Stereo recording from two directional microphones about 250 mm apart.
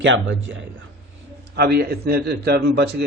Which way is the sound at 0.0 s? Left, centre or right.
Right.